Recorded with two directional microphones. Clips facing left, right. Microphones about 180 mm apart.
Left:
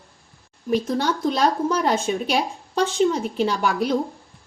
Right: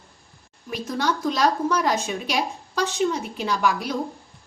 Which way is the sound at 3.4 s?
30° left (ahead or behind).